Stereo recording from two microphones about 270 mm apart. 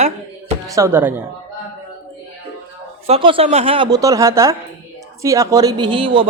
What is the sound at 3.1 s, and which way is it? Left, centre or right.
A man's voice, centre.